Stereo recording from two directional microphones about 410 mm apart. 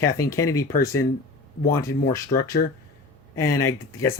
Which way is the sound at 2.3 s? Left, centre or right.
Left.